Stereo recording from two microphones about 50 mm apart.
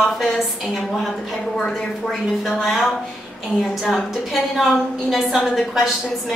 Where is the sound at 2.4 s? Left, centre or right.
Centre.